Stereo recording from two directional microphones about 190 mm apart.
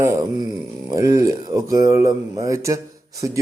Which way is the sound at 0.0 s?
15° right (ahead or behind).